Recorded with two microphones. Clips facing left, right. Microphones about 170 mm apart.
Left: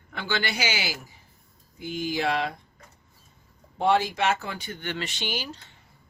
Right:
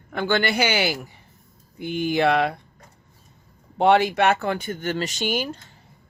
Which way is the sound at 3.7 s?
65° right (ahead or behind).